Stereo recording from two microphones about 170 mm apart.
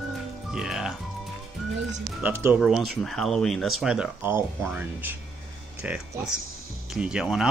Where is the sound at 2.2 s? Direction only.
15° right (ahead or behind).